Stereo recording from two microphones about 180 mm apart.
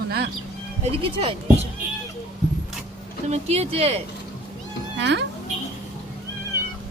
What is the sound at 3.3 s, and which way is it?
Speech, 35° right (ahead or behind).